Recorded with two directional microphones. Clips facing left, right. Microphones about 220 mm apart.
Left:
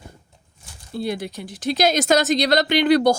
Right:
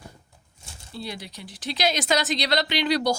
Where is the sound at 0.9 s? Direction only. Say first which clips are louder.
Left 10 dB; 50° left (ahead or behind).